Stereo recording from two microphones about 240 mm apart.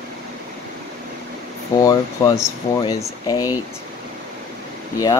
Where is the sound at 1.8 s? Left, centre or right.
Centre.